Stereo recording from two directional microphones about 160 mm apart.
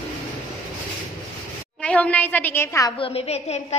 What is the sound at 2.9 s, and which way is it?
Speech, 35° left (ahead or behind).